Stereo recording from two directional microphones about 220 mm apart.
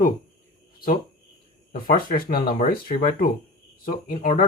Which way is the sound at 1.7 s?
40° left (ahead or behind).